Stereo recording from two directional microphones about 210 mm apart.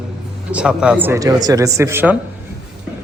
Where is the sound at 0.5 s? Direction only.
5° right (ahead or behind).